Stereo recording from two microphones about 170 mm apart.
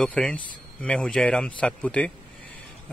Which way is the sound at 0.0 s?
5° left (ahead or behind).